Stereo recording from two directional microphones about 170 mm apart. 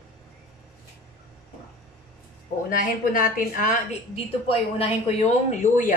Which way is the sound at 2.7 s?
55° left (ahead or behind).